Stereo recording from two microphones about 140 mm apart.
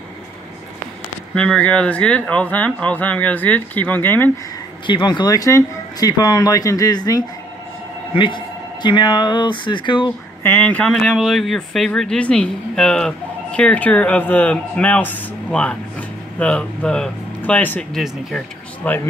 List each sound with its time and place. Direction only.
1.3 s speech: 5° left (ahead or behind)
4.8 s a man's voice: 35° left (ahead or behind)
10.4 s speech: 15° left (ahead or behind)